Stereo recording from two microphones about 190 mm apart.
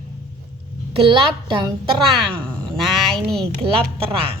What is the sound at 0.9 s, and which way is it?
Speech, 30° right (ahead or behind).